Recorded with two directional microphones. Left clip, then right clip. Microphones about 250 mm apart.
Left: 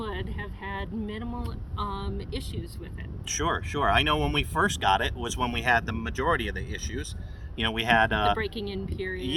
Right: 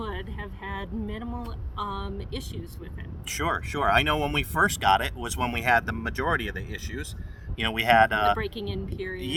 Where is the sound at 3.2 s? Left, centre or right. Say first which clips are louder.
Even; centre.